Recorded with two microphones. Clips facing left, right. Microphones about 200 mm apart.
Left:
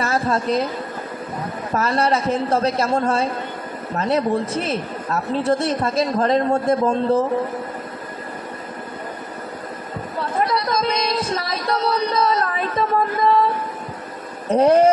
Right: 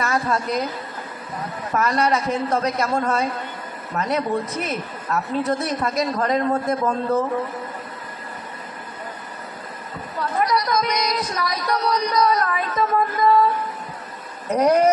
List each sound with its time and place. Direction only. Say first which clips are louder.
0.0 s a woman's voice: left 2 dB; 30° left (ahead or behind)
1.7 s speech: left 1 dB; 30° left (ahead or behind)
10.5 s music: left 1 dB; 25° left (ahead or behind)
14.5 s speech: left 3 dB; 30° left (ahead or behind)